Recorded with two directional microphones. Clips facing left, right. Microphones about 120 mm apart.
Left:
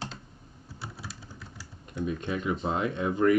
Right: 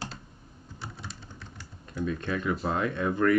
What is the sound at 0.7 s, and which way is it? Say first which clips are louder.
Typing: even; 5° left (ahead or behind).